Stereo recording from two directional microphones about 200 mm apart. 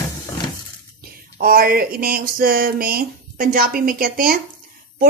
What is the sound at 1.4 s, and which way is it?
Speech, 45° right (ahead or behind).